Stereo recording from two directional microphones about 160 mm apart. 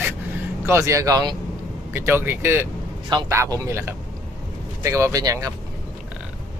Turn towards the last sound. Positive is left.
turn(degrees=-20)  # may be behind; listen again after turning